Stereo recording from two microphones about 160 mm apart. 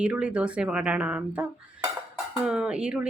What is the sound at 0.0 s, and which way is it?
Speech, 5° right (ahead or behind).